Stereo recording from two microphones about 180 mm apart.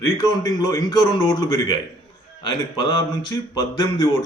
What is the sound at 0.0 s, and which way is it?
A man's voice, 20° left (ahead or behind).